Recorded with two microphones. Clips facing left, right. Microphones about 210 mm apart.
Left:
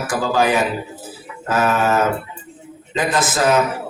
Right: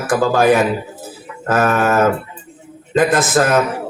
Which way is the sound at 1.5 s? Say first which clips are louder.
Right 3 dB; 55° right (ahead or behind).